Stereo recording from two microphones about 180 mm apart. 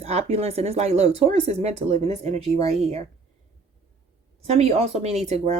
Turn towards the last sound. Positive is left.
turn(degrees=-35)  # may be behind; listen again after turning